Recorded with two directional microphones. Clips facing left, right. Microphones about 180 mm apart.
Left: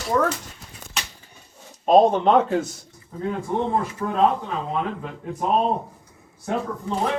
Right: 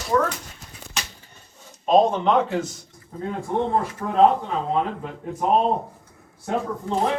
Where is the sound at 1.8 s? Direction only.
40° left (ahead or behind).